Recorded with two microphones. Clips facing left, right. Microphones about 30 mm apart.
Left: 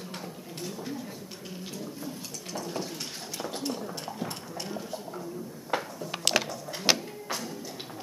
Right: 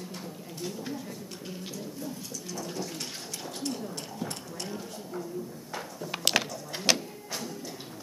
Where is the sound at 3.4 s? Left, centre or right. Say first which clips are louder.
Left 1 dB; centre.